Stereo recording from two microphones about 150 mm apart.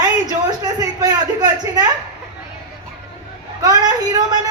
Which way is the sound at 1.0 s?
25° right (ahead or behind).